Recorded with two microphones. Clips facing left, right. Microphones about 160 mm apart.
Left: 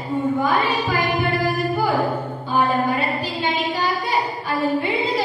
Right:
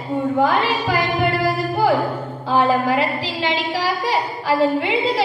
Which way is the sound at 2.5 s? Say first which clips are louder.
Right 3 dB; 90° right.